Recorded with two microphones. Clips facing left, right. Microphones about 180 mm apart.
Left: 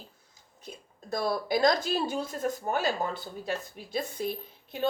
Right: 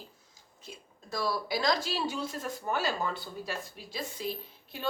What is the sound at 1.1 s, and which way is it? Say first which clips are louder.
A woman's voice: left 4 dB; 50° left (ahead or behind).